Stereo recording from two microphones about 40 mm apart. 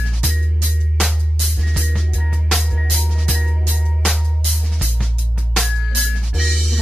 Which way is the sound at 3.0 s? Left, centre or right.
Left.